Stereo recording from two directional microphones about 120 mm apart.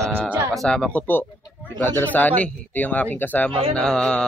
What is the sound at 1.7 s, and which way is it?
Speech, 15° left (ahead or behind).